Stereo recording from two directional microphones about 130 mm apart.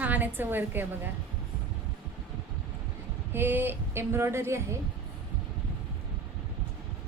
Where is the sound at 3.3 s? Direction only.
15° right (ahead or behind).